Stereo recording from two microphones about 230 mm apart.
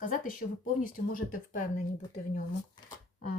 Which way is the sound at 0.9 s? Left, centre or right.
Left.